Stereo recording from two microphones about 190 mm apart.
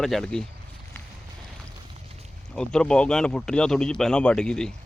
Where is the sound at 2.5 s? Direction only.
5° left (ahead or behind).